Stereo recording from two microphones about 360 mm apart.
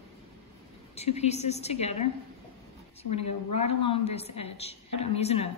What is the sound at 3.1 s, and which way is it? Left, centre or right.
Speech, left.